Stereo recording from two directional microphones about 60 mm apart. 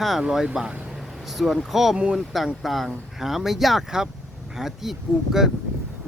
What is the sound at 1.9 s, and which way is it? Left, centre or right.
Speech, centre.